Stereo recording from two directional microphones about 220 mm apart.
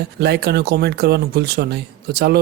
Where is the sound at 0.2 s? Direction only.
50° right (ahead or behind).